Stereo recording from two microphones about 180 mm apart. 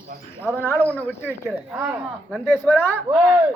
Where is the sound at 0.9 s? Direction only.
10° left (ahead or behind).